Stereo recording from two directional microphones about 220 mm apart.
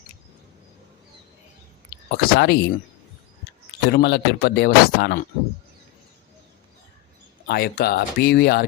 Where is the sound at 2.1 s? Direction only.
50° left (ahead or behind).